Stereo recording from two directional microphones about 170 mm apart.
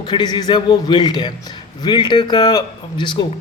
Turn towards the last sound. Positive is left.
turn(degrees=30)  # may be behind; listen again after turning